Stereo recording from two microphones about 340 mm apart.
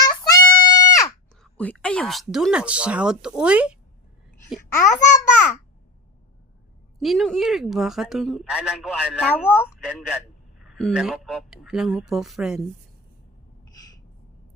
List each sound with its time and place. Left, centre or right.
0.3 s a child's voice: centre
4.8 s a child's voice: left
7.0 s speech: centre